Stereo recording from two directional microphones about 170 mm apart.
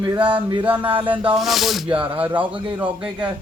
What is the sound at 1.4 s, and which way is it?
Speech, centre (ahead or behind).